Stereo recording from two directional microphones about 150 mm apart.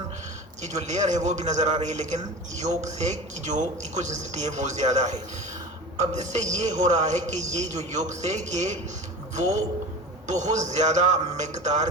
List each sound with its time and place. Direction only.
0.6 s a man's voice: 50° right (ahead or behind)